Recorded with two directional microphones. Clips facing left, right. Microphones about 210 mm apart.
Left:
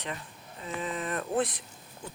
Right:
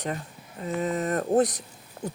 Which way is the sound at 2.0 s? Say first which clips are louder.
Right 10 dB; 60° right (ahead or behind).